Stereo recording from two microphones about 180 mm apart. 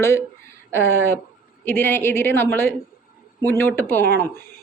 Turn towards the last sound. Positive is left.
turn(degrees=10)  # may be behind; listen again after turning